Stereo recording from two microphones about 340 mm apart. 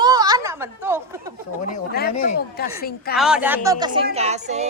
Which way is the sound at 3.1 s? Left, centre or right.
Centre.